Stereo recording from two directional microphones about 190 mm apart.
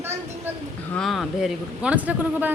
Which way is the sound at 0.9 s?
Centre (ahead or behind).